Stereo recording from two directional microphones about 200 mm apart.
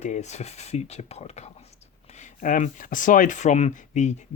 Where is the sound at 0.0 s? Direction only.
35° left (ahead or behind).